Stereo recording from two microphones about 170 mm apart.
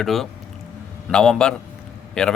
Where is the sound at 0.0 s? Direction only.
Centre (ahead or behind).